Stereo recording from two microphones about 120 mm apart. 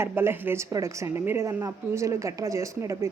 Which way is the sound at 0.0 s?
20° right (ahead or behind).